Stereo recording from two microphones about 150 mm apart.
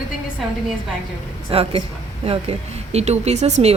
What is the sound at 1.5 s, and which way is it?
A woman's voice, 40° right (ahead or behind).